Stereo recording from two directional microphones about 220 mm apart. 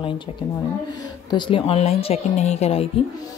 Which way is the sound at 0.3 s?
25° left (ahead or behind).